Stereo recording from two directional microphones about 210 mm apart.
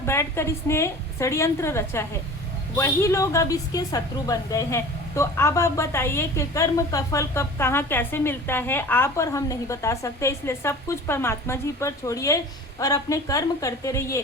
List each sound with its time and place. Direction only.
0.0 s a woman's voice: 10° left (ahead or behind)